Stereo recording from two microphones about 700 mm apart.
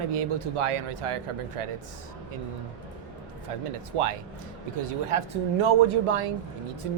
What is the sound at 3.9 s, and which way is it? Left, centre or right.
Speech, right.